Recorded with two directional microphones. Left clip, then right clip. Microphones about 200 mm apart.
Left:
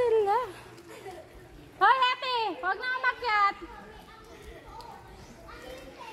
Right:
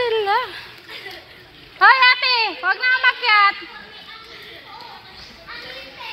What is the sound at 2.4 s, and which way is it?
A woman's voice, 30° right (ahead or behind).